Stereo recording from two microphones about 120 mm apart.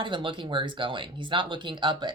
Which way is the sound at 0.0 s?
45° right (ahead or behind).